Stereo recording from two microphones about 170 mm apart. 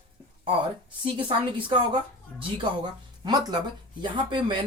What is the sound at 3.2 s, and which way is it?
A woman's voice, 25° right (ahead or behind).